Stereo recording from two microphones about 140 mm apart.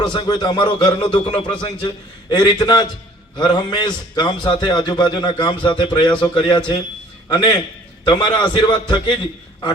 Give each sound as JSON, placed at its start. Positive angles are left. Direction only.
{"t": 0.0, "sound": "a man's voice", "side_deg": 30}